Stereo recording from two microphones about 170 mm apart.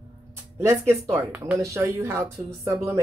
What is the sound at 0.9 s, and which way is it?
Speech, 10° right (ahead or behind).